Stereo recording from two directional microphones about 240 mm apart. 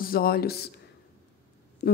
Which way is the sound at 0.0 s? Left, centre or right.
Left.